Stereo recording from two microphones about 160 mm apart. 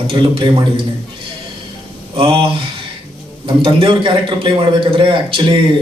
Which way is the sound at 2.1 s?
35° right (ahead or behind).